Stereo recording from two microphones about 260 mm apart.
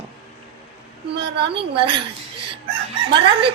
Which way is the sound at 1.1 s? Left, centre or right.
Right.